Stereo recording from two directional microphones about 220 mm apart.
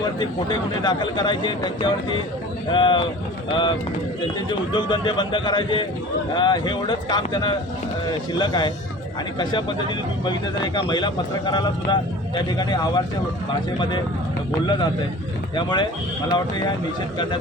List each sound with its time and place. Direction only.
0.2 s speech: 20° left (ahead or behind)
15.5 s speech: 20° left (ahead or behind)